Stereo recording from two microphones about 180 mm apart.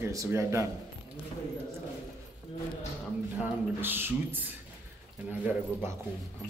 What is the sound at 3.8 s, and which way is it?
Speech, 10° right (ahead or behind).